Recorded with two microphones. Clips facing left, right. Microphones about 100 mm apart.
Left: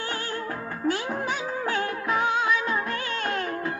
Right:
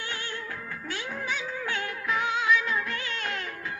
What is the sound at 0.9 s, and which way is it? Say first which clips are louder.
Music: left 8 dB; 35° left (ahead or behind).